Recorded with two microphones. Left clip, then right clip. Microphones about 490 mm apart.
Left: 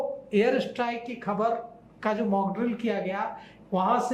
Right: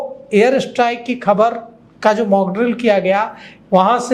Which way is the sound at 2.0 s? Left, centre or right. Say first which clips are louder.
Right 13 dB; right.